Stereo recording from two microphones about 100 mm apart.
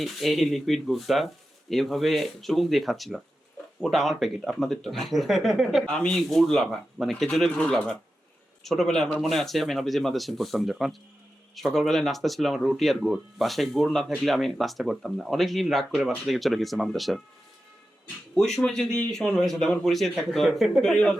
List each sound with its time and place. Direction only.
0.0 s speech: centre (ahead or behind)
18.6 s speech: 5° left (ahead or behind)
20.9 s speech: 10° left (ahead or behind)